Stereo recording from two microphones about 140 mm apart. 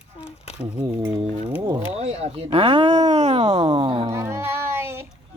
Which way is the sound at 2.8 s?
55° right (ahead or behind).